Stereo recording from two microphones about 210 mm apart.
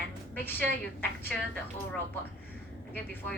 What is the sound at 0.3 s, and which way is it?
A woman's voice, 10° left (ahead or behind).